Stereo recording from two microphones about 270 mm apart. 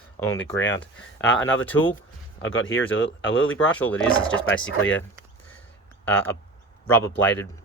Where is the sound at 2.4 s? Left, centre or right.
Left.